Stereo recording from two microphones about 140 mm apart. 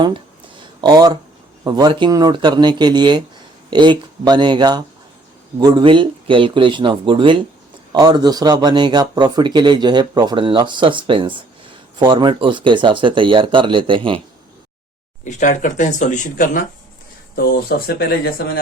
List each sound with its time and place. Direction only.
0.0 s a sound: 35° right (ahead or behind)
1.6 s speech: 30° right (ahead or behind)
15.2 s speech: 60° left (ahead or behind)
17.3 s speech: 90° left